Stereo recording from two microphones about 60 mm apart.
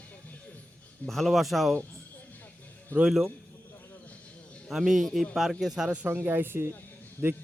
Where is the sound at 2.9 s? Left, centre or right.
Left.